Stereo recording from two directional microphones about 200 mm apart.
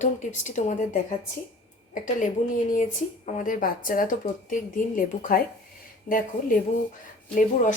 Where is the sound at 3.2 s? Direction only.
40° left (ahead or behind).